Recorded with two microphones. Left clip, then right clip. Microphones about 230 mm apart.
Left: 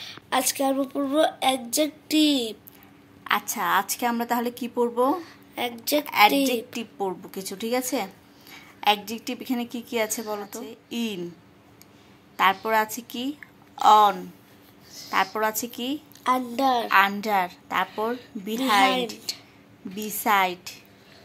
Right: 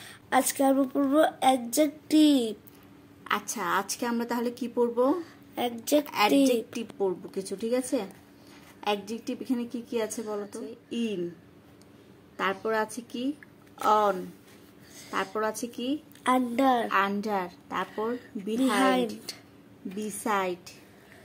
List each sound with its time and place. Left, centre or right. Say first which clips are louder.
0.0 s a woman's voice: left 1 dB; right
3.3 s a woman's voice: left 5 dB; centre
5.2 s a woman's voice: left 1 dB; right
6.0 s a woman's voice: left 7 dB; centre
12.6 s a woman's voice: left 5 dB; centre
15.4 s a woman's voice: left 4 dB; centre
16.3 s a woman's voice: left 2 dB; right
16.9 s a woman's voice: left 7 dB; centre